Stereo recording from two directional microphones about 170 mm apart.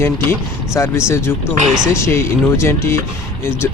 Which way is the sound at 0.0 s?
15° left (ahead or behind).